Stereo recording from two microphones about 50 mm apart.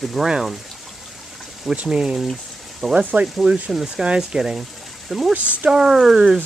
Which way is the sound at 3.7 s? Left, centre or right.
Centre.